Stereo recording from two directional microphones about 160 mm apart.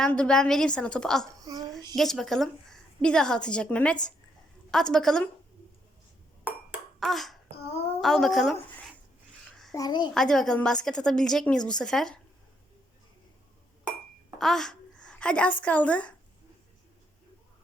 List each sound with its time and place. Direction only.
0.0 s a woman's voice: 5° left (ahead or behind)
1.4 s a child's voice: 25° right (ahead or behind)
2.0 s a woman's voice: centre (ahead or behind)
6.7 s ping: centre (ahead or behind)
8.0 s a woman's voice: centre (ahead or behind)
9.7 s a child's voice: 25° left (ahead or behind)
10.2 s a woman's voice: 5° left (ahead or behind)
14.3 s a woman's voice: centre (ahead or behind)